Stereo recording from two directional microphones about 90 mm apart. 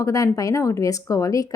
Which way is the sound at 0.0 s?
40° left (ahead or behind).